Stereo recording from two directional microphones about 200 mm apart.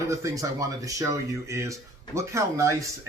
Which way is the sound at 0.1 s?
15° right (ahead or behind).